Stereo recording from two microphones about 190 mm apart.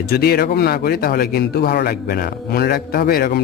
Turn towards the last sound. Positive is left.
turn(degrees=50)  # may be behind; listen again after turning